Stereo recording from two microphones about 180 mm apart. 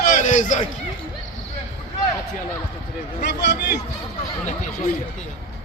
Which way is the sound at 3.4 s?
70° left (ahead or behind).